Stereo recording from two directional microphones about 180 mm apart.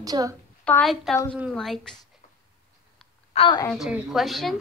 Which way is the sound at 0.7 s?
5° left (ahead or behind).